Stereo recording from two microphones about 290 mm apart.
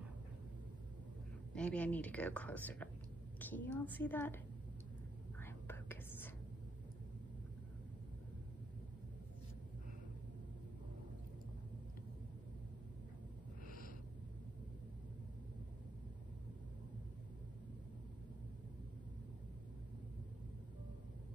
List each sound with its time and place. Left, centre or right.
1.5 s a woman's voice: centre
5.4 s whispering: centre
13.7 s a sound: left